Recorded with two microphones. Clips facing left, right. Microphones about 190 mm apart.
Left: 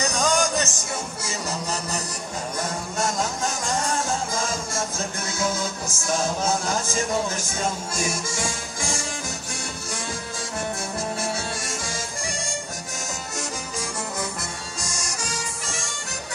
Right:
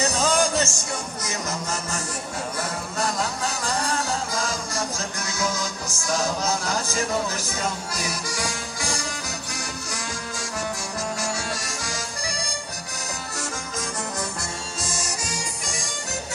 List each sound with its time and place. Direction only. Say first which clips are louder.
0.1 s music: right 1 dB; 5° right (ahead or behind)
1.2 s speech: even; 10° left (ahead or behind)
3.0 s music: left 1 dB; 20° left (ahead or behind)
11.1 s music: left 1 dB; 25° left (ahead or behind)
15.0 s music: even; 10° right (ahead or behind)